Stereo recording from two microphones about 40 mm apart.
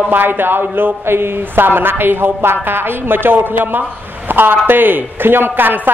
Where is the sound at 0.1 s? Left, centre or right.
Right.